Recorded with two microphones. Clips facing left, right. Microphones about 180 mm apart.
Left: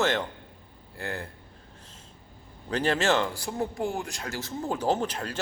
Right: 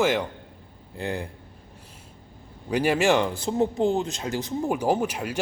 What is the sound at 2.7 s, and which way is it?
Speech, 10° right (ahead or behind).